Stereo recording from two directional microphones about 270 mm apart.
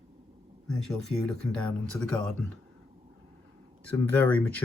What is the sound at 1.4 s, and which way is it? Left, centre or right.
Speech, centre.